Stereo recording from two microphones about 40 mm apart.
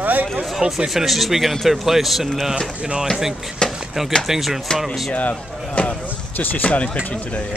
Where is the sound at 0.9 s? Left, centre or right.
Centre.